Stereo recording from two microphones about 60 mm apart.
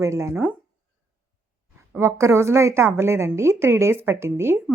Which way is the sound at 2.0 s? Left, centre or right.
Right.